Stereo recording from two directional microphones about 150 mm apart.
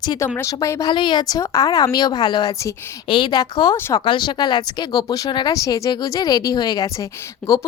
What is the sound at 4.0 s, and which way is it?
Speech, 30° left (ahead or behind).